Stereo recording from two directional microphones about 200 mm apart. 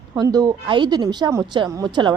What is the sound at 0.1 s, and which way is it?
A woman's voice, 20° right (ahead or behind).